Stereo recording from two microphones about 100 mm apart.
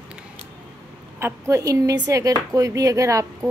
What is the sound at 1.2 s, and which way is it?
A woman's voice, 30° right (ahead or behind).